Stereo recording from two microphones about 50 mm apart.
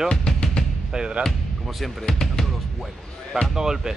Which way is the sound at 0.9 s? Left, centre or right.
Centre.